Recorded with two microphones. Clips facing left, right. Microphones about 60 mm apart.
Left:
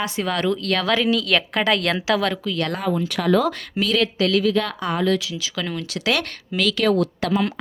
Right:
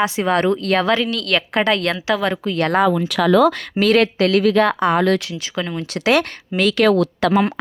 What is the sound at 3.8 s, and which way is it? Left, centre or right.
Speech, right.